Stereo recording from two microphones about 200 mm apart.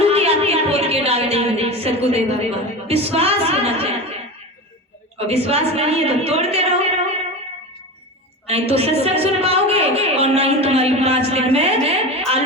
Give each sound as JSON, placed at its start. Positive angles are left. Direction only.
{"t": 0.0, "sound": "a sound", "side_deg": -30}
{"t": 5.1, "sound": "a woman's voice", "side_deg": -30}
{"t": 8.4, "sound": "a woman's voice", "side_deg": -30}